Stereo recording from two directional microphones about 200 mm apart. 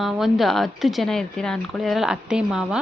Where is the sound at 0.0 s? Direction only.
Centre (ahead or behind).